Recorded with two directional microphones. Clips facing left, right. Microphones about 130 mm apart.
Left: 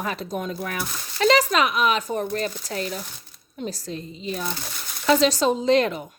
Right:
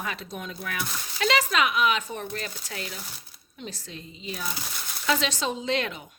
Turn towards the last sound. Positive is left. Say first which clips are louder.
# left 9 dB
turn(degrees=40)  # may be behind; listen again after turning